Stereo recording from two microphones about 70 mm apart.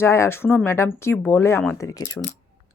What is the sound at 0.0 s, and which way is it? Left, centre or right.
Speech, left.